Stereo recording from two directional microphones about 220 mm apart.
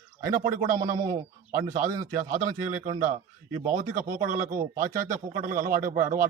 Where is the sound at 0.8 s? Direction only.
15° right (ahead or behind).